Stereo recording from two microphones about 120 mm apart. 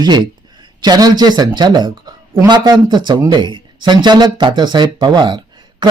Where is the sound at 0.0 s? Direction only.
35° right (ahead or behind).